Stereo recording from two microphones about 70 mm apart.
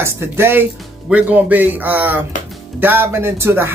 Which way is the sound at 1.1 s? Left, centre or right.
Right.